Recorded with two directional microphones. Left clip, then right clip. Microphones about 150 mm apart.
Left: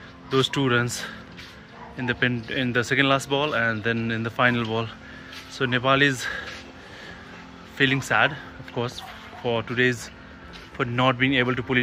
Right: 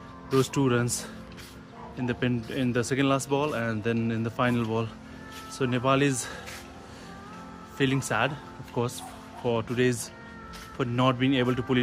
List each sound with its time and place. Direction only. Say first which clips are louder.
0.4 s speech: left 4 dB; 15° right (ahead or behind)
7.7 s speech: left 6 dB; 10° right (ahead or behind)
8.7 s speech: left 1 dB; 20° right (ahead or behind)